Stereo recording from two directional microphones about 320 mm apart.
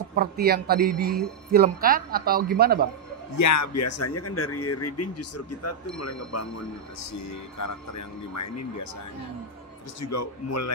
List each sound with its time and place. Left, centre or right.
0.1 s a man's voice: right
3.3 s a man's voice: left
9.9 s a man's voice: left